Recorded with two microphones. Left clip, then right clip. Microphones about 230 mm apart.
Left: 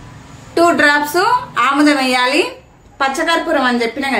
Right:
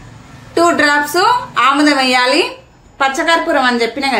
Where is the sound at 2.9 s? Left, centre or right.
Centre.